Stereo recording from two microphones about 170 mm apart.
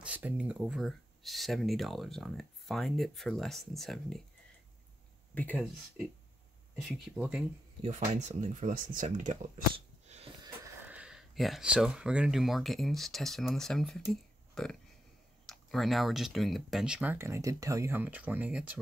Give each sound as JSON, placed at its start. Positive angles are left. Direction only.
{"t": 0.0, "sound": "speech", "side_deg": -10}
{"t": 5.3, "sound": "speech", "side_deg": 10}
{"t": 7.2, "sound": "speech", "side_deg": -5}
{"t": 7.8, "sound": "speech", "side_deg": -45}
{"t": 9.8, "sound": "sniff", "side_deg": -35}
{"t": 10.9, "sound": "speech", "side_deg": -5}